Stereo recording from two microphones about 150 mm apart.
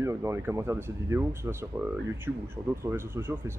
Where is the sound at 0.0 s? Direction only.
20° right (ahead or behind).